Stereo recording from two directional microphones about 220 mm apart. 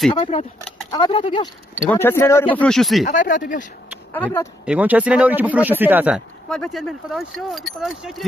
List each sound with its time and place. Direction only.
0.1 s speech: 25° left (ahead or behind)
1.8 s speech: 10° left (ahead or behind)
3.2 s speech: 35° left (ahead or behind)
4.1 s speech: 10° left (ahead or behind)
4.6 s speech: 5° right (ahead or behind)